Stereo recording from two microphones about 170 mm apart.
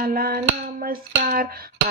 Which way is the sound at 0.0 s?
60° right (ahead or behind).